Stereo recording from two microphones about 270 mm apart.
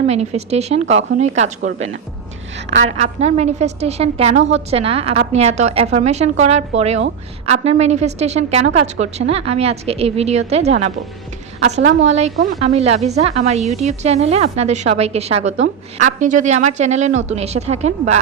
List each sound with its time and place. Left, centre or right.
0.1 s a woman's voice: right
12.0 s a woman's voice: right